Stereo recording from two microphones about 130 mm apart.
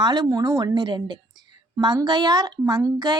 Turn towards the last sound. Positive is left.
turn(degrees=-30)  # may be behind; listen again after turning